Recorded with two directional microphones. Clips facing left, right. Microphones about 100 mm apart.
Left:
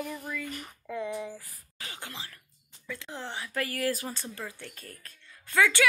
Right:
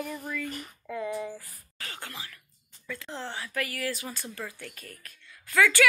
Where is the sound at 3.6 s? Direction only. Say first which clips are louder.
Left 3 dB; 40° left (ahead or behind).